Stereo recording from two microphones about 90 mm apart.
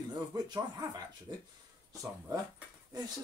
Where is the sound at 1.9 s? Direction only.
40° right (ahead or behind).